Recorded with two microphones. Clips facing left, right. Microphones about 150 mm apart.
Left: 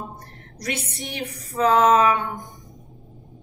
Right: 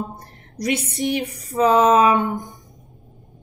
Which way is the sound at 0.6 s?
20° right (ahead or behind).